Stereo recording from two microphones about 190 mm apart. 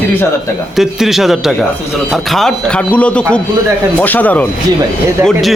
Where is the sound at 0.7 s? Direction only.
Centre (ahead or behind).